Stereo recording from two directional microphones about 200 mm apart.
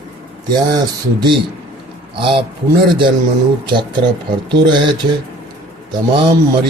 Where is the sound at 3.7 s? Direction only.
25° right (ahead or behind).